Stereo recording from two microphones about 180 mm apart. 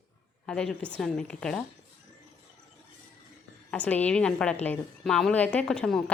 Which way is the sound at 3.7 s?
10° left (ahead or behind).